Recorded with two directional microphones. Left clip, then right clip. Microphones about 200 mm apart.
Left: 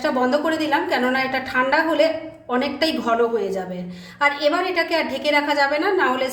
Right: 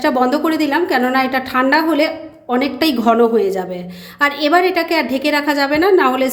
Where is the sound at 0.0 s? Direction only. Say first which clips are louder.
Right 5 dB; 40° right (ahead or behind).